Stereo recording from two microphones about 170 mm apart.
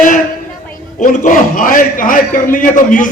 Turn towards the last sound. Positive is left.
turn(degrees=50)  # may be behind; listen again after turning